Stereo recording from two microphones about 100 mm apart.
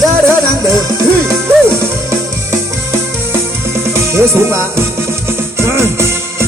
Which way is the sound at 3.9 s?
25° right (ahead or behind).